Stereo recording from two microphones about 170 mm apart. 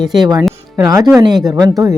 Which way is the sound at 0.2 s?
25° right (ahead or behind).